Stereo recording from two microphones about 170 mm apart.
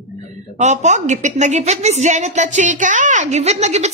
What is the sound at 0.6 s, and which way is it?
A woman's voice, 45° right (ahead or behind).